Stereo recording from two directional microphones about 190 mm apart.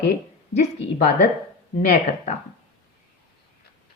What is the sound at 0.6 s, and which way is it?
Speech, 35° left (ahead or behind).